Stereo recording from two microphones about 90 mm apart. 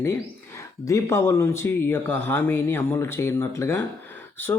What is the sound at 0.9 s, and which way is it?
Speech, 35° left (ahead or behind).